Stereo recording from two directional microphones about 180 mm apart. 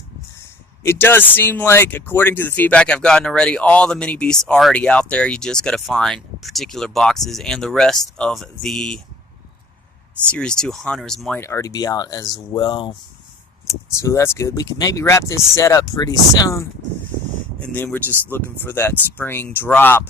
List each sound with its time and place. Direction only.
0.8 s speech: 15° left (ahead or behind)
10.2 s speech: 5° left (ahead or behind)
11.3 s speech: 15° left (ahead or behind)
17.6 s speech: 5° left (ahead or behind)